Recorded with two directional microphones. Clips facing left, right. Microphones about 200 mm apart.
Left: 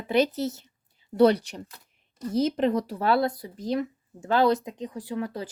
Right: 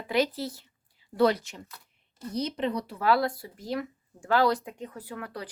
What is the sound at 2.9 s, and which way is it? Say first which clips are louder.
Speech: left 2 dB; 30° left (ahead or behind).